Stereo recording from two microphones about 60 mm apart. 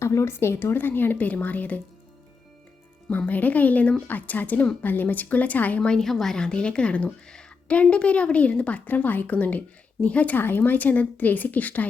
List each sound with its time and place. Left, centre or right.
0.0 s speech: left
3.1 s speech: left
5.9 s speech: centre; by 11.9 s left